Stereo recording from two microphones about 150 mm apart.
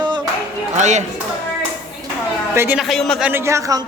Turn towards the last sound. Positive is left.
turn(degrees=-20)  # may be behind; listen again after turning